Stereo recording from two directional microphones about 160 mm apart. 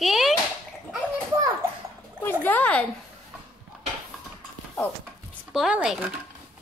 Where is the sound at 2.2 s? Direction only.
10° left (ahead or behind).